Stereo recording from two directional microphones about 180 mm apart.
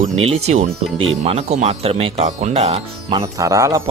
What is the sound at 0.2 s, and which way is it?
Speech, 35° right (ahead or behind).